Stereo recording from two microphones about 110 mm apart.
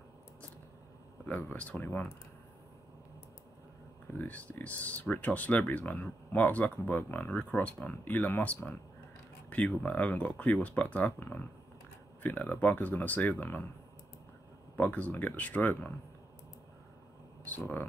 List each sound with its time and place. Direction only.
1.2 s speech: 15° left (ahead or behind)
4.1 s speech: 15° left (ahead or behind)
14.8 s speech: 15° left (ahead or behind)
17.5 s speech: 15° left (ahead or behind)